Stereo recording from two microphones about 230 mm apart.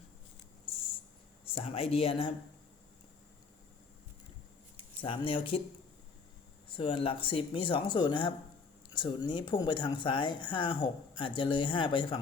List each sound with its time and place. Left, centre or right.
0.6 s a sound: left
1.5 s speech: left
5.0 s speech: left
6.7 s speech: left